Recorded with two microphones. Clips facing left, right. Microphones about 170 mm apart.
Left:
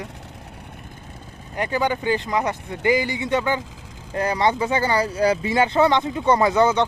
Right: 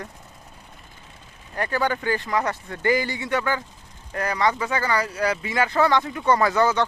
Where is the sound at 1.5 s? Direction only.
15° left (ahead or behind).